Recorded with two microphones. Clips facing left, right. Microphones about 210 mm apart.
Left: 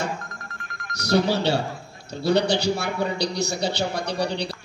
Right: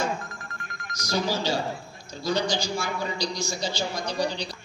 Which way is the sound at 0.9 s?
65° left (ahead or behind).